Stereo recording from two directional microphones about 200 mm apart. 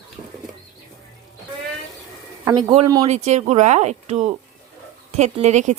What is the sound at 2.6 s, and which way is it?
Speech, 20° right (ahead or behind).